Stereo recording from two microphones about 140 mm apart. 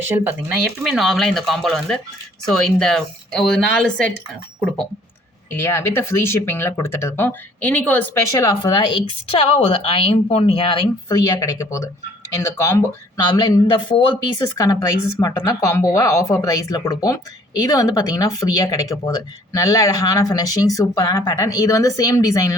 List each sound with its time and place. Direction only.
0.6 s speech: centre (ahead or behind)
5.5 s speech: 15° left (ahead or behind)
8.3 s speech: 20° left (ahead or behind)
8.7 s a woman's voice: 35° left (ahead or behind)
11.1 s speech: 25° left (ahead or behind)